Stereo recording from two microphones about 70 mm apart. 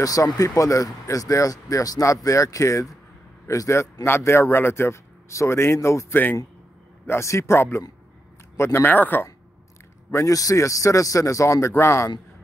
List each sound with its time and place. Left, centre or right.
0.0 s speech: left
8.8 s speech: left
10.1 s speech: left